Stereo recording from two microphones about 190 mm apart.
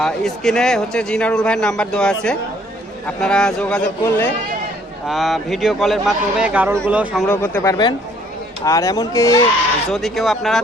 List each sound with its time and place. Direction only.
0.0 s a man's voice: 5° left (ahead or behind)
5.0 s a man's voice: centre (ahead or behind)
7.3 s speech: 10° left (ahead or behind)
9.9 s a man's voice: centre (ahead or behind)